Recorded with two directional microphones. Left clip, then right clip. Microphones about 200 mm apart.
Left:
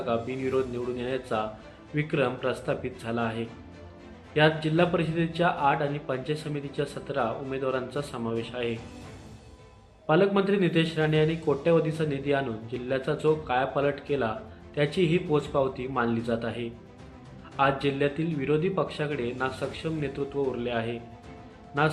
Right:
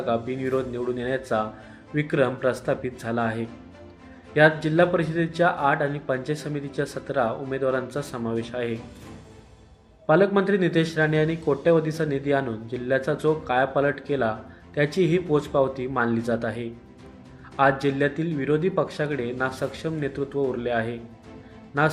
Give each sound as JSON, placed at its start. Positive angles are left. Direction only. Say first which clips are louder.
{"t": 0.0, "sound": "a man's voice", "louder": "right 3 dB", "side_deg": -15}
{"t": 10.1, "sound": "a man's voice", "louder": "right 4 dB", "side_deg": -15}